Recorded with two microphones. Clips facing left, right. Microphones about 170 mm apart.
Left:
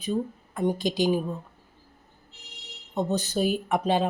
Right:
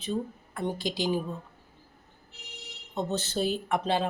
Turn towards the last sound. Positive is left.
turn(degrees=15)  # may be behind; listen again after turning